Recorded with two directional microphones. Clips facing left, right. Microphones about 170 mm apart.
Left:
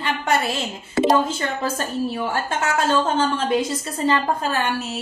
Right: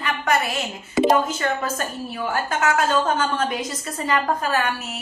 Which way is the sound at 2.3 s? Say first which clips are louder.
Right 1 dB; 30° left (ahead or behind).